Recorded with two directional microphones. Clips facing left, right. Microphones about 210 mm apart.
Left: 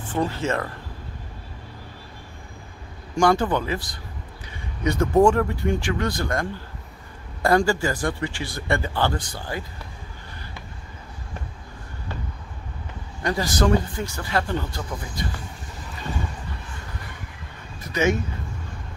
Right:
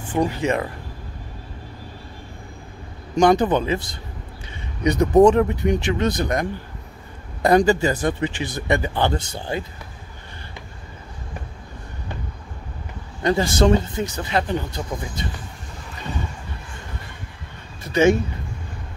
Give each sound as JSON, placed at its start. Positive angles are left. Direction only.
{"t": 0.1, "sound": "speech", "side_deg": -15}
{"t": 3.2, "sound": "speech", "side_deg": -20}
{"t": 7.4, "sound": "speech", "side_deg": -20}
{"t": 13.2, "sound": "speech", "side_deg": -25}
{"t": 17.8, "sound": "a sound", "side_deg": -30}